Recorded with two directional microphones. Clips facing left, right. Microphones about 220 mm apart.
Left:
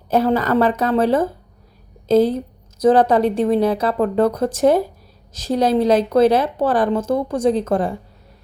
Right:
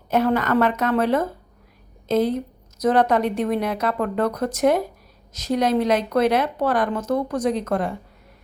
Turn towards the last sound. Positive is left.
turn(degrees=30)  # may be behind; listen again after turning